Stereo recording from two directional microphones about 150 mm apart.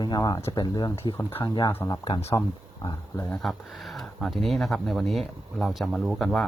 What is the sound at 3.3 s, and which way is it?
Speech, centre (ahead or behind).